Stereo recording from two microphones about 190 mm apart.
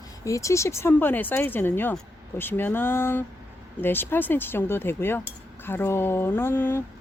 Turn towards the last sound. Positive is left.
turn(degrees=10)  # may be behind; listen again after turning